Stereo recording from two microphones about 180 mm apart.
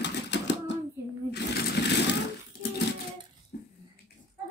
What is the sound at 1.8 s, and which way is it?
Vehicle, 70° left (ahead or behind).